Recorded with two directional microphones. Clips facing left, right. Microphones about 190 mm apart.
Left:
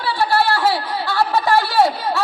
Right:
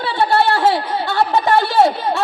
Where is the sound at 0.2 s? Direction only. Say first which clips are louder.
Right 3 dB; 20° right (ahead or behind).